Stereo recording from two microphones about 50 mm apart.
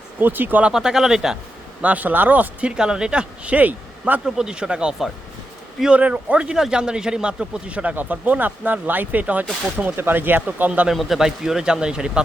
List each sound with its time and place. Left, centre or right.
0.2 s speech: right
0.7 s speech: centre
1.8 s speech: right
2.7 s speech: centre; by 4.2 s right
4.4 s speech: centre
5.9 s speech: right
9.7 s speech: right
10.9 s speech: centre